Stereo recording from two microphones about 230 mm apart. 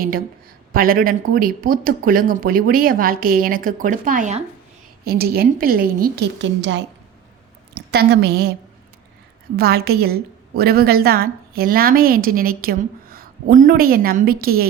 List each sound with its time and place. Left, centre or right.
0.7 s a woman's voice: right
5.0 s a woman's voice: right
7.9 s a woman's voice: right
9.6 s a woman's voice: right